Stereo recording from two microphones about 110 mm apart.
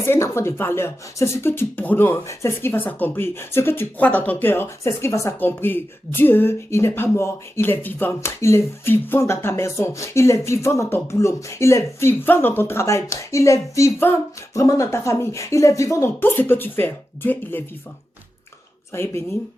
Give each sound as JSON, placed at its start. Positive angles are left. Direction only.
{"t": 0.0, "sound": "speech", "side_deg": 25}
{"t": 18.9, "sound": "speech", "side_deg": 25}